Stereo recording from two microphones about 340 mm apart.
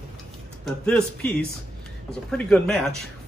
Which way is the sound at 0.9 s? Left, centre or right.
Centre.